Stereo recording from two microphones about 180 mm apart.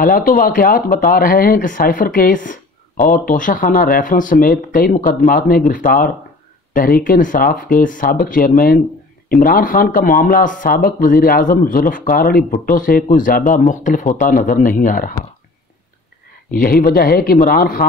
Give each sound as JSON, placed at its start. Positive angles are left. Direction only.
{"t": 0.0, "sound": "speech", "side_deg": 50}
{"t": 6.7, "sound": "speech", "side_deg": 50}
{"t": 16.4, "sound": "speech", "side_deg": 50}